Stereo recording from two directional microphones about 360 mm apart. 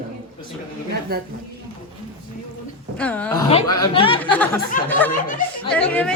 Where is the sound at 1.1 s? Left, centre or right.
Right.